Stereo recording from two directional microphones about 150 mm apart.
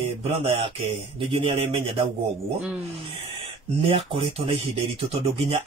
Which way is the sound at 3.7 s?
35° right (ahead or behind).